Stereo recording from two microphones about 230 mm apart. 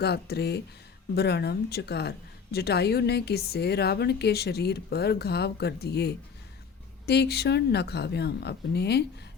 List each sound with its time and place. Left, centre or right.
0.0 s speech: left